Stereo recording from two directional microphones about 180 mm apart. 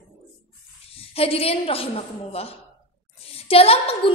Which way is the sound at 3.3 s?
35° left (ahead or behind).